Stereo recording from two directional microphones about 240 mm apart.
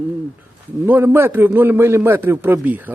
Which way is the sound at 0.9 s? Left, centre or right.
Centre.